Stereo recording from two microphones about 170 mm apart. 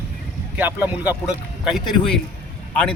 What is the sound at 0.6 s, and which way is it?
Speech, 10° right (ahead or behind).